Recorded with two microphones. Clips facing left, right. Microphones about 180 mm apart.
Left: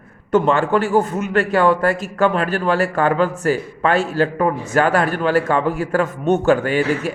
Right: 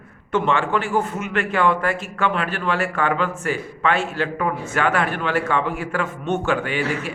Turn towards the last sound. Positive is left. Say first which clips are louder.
# left 6 dB
turn(degrees=40)  # may be behind; listen again after turning